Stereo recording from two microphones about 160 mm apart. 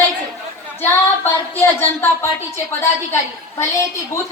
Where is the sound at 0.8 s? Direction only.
10° left (ahead or behind).